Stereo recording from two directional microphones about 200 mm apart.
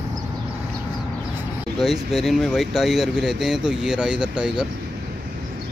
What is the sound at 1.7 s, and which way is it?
Speech, centre (ahead or behind).